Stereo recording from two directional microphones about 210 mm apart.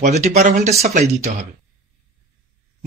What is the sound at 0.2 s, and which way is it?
Speech, 35° right (ahead or behind).